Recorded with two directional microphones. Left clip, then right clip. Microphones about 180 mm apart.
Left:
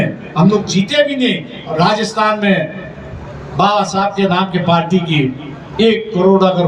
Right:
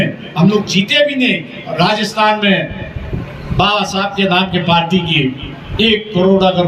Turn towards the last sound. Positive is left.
turn(degrees=25)  # may be behind; listen again after turning